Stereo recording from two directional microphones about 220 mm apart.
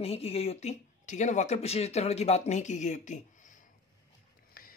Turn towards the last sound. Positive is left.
turn(degrees=35)  # may be behind; listen again after turning